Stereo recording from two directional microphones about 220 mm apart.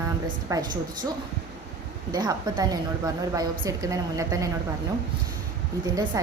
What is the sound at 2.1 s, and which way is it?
A woman's voice, 20° right (ahead or behind).